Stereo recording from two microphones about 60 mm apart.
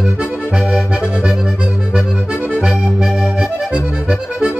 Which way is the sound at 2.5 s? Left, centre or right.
Centre.